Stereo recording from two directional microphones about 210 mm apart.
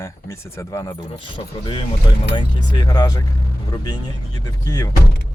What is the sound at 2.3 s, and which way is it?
Speech, 20° left (ahead or behind).